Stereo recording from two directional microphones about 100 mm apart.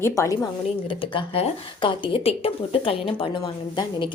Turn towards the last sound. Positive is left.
turn(degrees=50)  # may be behind; listen again after turning